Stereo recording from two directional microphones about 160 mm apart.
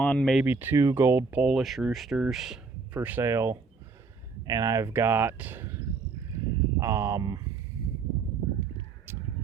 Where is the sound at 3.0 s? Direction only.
15° right (ahead or behind).